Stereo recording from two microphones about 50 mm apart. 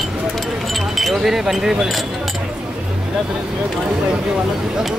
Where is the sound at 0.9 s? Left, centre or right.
Centre.